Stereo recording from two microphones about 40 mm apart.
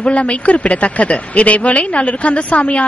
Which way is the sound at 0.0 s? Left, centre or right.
Left.